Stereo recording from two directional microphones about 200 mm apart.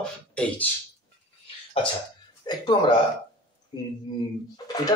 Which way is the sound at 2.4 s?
25° left (ahead or behind).